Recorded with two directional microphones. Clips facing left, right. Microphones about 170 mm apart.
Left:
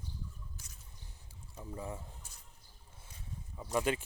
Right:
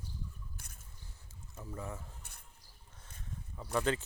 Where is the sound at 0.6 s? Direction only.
60° right (ahead or behind).